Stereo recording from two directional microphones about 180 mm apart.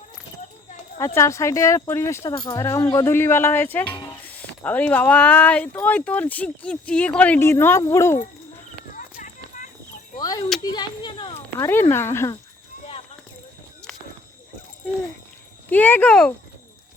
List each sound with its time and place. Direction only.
0.9 s speech: 15° left (ahead or behind)
9.0 s run: 45° left (ahead or behind)
10.2 s a sound: 20° left (ahead or behind)
11.6 s speech: 10° left (ahead or behind)
15.7 s speech: 10° left (ahead or behind)